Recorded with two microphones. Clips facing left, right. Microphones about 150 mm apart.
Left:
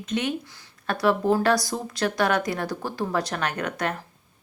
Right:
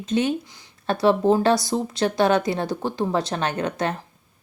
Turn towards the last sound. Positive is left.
turn(degrees=-25)  # may be behind; listen again after turning